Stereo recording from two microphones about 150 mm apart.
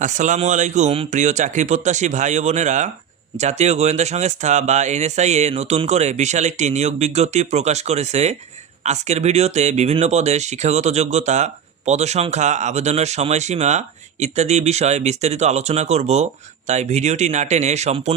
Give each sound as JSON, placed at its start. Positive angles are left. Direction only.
{"t": 0.0, "sound": "speech", "side_deg": -55}